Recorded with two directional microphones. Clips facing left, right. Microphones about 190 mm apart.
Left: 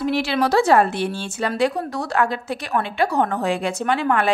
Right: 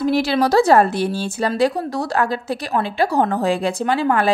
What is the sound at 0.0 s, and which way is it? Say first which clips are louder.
A woman's voice: right 3 dB; 40° right (ahead or behind).